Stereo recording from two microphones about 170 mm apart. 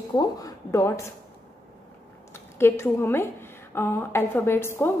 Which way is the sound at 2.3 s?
15° left (ahead or behind).